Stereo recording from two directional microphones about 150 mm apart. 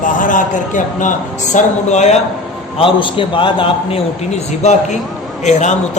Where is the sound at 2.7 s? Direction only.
35° left (ahead or behind).